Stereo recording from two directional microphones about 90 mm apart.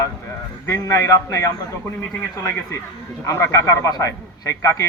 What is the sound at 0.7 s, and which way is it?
Speech, 35° left (ahead or behind).